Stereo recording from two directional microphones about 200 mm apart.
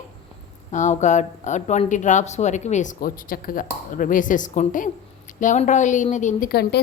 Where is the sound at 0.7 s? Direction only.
35° left (ahead or behind).